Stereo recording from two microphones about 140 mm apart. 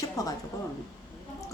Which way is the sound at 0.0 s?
25° left (ahead or behind).